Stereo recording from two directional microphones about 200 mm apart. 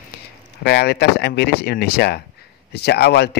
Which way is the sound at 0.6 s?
55° left (ahead or behind).